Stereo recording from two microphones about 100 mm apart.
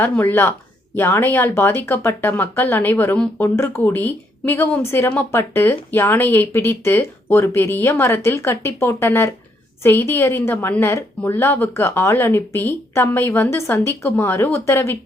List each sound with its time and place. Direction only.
0.0 s speech: 20° left (ahead or behind)